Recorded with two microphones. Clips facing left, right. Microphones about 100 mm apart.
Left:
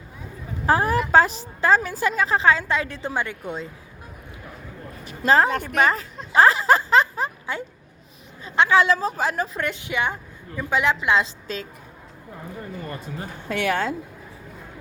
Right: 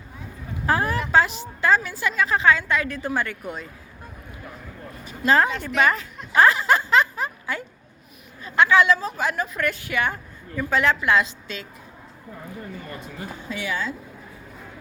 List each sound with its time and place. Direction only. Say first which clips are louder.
0.6 s a woman's voice: left 3 dB; 30° left (ahead or behind)
5.2 s a woman's voice: left 1 dB; 30° left (ahead or behind)
5.5 s a woman's voice: left 2 dB; 45° left (ahead or behind)
5.8 s a woman's voice: right 1 dB; 35° left (ahead or behind)
11.3 s a woman's voice: left 4 dB; 35° left (ahead or behind)
13.5 s speech: left 6 dB; 70° left (ahead or behind)